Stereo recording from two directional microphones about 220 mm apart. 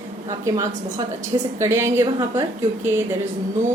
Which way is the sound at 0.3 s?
15° right (ahead or behind).